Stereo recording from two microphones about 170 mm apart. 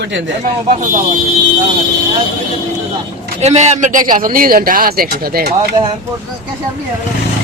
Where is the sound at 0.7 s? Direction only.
45° right (ahead or behind).